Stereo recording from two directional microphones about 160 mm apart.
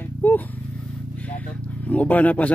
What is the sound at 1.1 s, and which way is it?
Vehicle, 10° left (ahead or behind).